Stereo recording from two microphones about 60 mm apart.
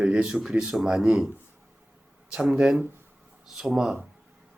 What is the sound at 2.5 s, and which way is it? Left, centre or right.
Speech, centre.